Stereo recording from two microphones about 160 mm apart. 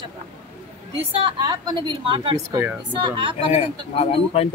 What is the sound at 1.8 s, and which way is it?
Speech, 30° right (ahead or behind).